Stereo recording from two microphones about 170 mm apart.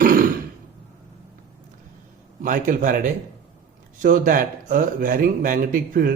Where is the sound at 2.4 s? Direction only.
50° right (ahead or behind).